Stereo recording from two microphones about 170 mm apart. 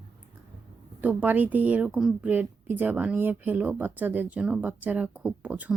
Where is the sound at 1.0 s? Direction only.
10° right (ahead or behind).